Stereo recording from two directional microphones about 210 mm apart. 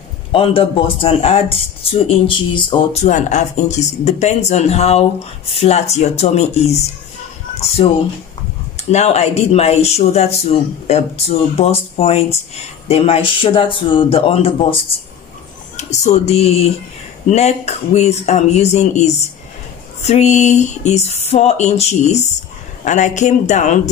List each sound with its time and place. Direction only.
0.3 s speech: 25° left (ahead or behind)